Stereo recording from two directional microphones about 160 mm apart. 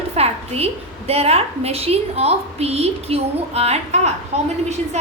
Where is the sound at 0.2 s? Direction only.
40° right (ahead or behind).